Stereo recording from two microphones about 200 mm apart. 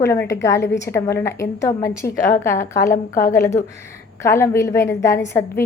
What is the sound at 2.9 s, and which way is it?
Speech, 40° left (ahead or behind).